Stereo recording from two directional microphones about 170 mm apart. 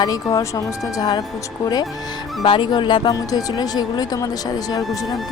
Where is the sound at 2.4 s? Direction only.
30° left (ahead or behind).